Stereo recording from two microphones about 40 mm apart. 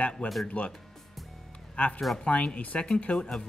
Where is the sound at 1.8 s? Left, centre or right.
Left.